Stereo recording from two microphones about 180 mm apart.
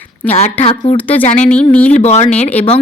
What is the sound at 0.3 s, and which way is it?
Speech, 35° left (ahead or behind).